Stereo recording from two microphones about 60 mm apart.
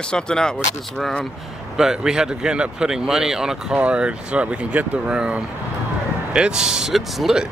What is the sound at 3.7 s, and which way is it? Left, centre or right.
Speech, centre.